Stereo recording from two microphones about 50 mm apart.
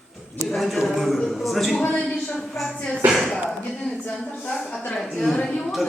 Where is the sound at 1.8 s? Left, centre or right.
Left.